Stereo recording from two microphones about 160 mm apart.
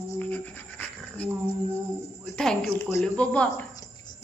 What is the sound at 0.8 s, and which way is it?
Dog, 10° left (ahead or behind).